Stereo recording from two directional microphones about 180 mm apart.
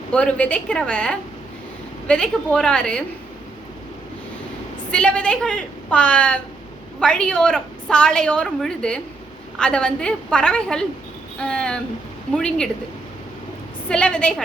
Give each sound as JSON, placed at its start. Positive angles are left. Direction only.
{"t": 0.1, "sound": "a woman's voice", "side_deg": 5}
{"t": 4.9, "sound": "a woman's voice", "side_deg": 5}
{"t": 13.8, "sound": "a woman's voice", "side_deg": 5}